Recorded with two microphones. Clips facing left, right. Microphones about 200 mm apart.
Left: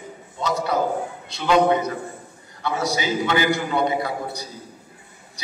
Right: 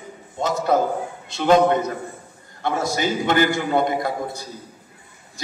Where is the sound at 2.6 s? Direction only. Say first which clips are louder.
Right 2 dB; 50° right (ahead or behind).